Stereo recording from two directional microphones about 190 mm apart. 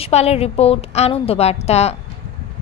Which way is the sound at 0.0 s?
35° left (ahead or behind).